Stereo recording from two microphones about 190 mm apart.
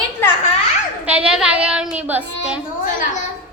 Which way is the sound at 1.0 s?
5° right (ahead or behind).